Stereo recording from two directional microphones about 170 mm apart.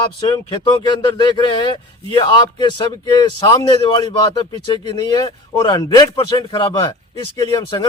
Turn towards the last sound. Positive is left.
turn(degrees=25)  # may be behind; listen again after turning